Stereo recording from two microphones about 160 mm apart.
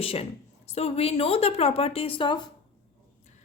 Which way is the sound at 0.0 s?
35° left (ahead or behind).